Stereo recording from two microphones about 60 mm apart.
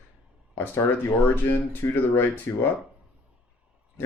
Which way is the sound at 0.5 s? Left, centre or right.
Left.